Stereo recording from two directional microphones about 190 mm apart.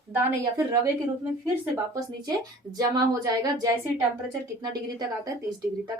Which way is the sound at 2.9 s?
20° right (ahead or behind).